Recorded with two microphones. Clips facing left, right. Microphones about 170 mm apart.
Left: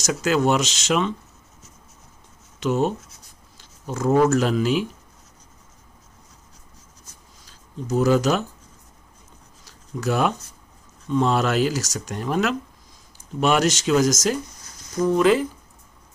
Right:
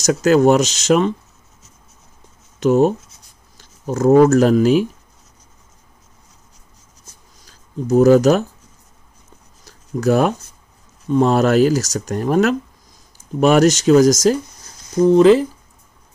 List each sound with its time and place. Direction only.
0.0 s speech: 40° right (ahead or behind)
2.6 s speech: 45° right (ahead or behind)
3.5 s a sound: 45° right (ahead or behind)
4.3 s speech: 45° right (ahead or behind)
7.9 s speech: 45° right (ahead or behind)
9.7 s a sound: 45° right (ahead or behind)
11.1 s speech: 45° right (ahead or behind)